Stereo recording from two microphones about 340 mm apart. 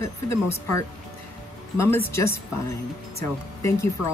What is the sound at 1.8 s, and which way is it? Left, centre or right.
A woman's voice, centre.